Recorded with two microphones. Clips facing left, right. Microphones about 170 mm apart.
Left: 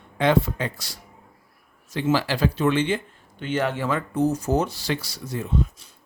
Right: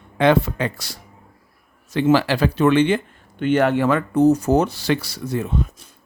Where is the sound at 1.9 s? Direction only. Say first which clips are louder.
Right 6 dB; 70° right (ahead or behind).